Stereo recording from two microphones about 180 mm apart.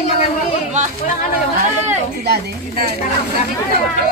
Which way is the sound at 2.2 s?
60° right (ahead or behind).